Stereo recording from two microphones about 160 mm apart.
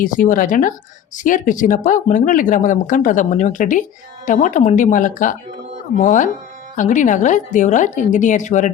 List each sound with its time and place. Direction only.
0.0 s a woman's voice: 55° left (ahead or behind)